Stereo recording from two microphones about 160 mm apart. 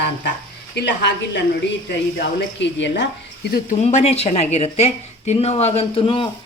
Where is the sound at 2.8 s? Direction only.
90° left.